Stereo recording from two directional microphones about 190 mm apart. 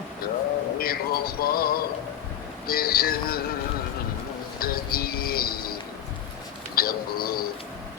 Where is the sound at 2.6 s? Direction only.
50° left (ahead or behind).